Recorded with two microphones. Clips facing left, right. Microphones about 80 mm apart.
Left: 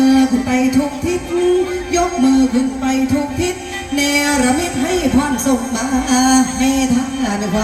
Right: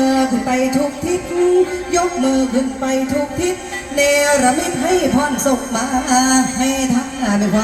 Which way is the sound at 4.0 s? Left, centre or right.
Right.